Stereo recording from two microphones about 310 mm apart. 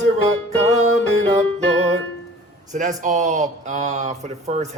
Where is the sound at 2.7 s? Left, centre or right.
Right.